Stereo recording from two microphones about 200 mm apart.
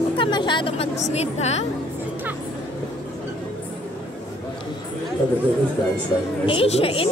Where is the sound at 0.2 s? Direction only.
25° left (ahead or behind).